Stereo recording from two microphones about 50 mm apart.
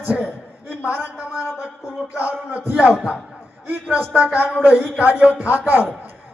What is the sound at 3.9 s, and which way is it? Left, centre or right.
A woman's voice, right.